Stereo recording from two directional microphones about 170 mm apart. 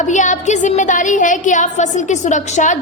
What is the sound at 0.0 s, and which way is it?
A woman's voice, 45° left (ahead or behind).